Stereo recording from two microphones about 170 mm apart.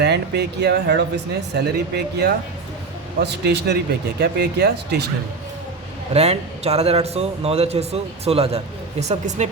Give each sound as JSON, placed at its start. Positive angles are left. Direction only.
{"t": 0.0, "sound": "speech", "side_deg": -75}
{"t": 6.1, "sound": "a man's voice", "side_deg": -40}